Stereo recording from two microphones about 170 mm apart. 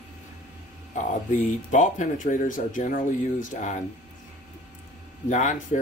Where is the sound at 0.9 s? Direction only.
45° left (ahead or behind).